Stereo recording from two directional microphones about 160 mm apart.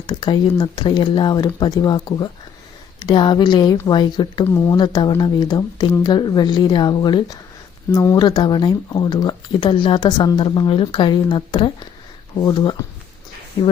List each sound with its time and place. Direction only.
0.1 s speech: 25° left (ahead or behind)